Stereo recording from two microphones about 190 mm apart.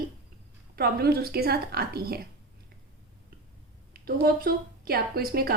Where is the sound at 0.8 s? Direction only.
55° right (ahead or behind).